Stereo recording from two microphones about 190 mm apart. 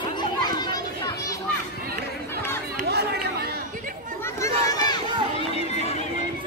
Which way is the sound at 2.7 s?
55° right (ahead or behind).